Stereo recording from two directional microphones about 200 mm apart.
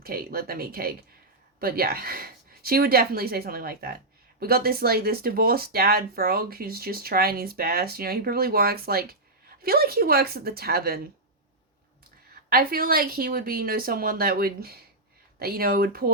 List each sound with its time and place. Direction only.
0.0 s speech: 50° right (ahead or behind)
12.5 s speech: 45° right (ahead or behind)